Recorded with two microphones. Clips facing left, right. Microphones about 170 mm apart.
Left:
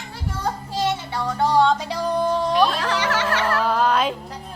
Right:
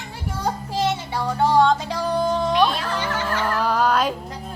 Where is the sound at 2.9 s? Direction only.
80° left.